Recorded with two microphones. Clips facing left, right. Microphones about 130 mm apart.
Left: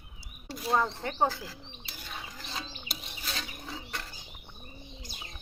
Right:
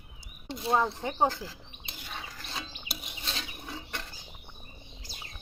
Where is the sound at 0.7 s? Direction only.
10° right (ahead or behind).